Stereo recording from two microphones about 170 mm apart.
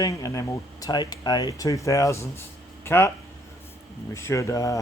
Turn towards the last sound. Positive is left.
turn(degrees=20)  # may be behind; listen again after turning